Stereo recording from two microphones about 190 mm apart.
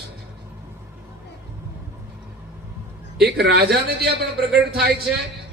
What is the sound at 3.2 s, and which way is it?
A man's voice, 55° right (ahead or behind).